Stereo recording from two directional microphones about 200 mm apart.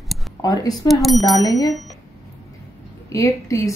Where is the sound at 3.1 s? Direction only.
15° left (ahead or behind).